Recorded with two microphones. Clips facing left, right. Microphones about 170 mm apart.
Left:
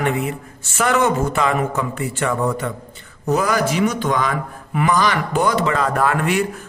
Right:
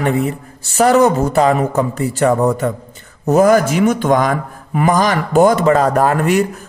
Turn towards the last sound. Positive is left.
turn(degrees=-40)  # may be behind; listen again after turning